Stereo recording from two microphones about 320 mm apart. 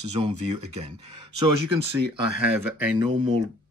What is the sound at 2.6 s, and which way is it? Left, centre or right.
Speech, centre.